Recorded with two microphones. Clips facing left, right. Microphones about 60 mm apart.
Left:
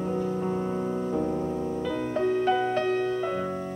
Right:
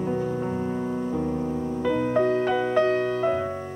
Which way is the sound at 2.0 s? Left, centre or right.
Right.